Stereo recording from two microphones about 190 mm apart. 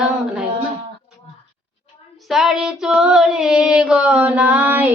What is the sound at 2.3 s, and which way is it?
Female singing, centre (ahead or behind).